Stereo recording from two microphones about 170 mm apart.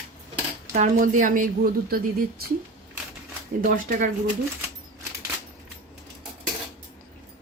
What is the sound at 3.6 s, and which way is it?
Speech, 50° right (ahead or behind).